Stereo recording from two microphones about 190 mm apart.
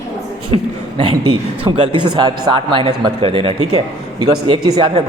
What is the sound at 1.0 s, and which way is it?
Speech, 25° right (ahead or behind).